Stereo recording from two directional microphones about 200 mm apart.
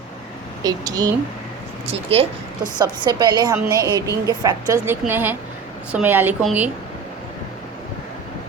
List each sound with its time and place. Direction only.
0.6 s a woman's voice: 20° right (ahead or behind)
1.9 s a woman's voice: 30° right (ahead or behind); by 6.7 s 10° right (ahead or behind)